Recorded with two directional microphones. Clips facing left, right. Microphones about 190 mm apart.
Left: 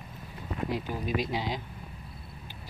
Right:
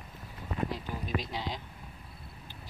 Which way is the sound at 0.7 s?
10° left (ahead or behind).